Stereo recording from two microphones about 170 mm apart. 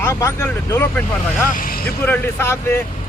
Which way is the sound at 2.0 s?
10° left (ahead or behind).